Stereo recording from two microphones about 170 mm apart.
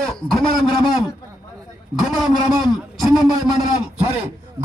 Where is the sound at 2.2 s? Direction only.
Centre (ahead or behind).